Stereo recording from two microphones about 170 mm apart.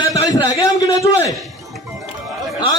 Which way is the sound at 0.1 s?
20° left (ahead or behind).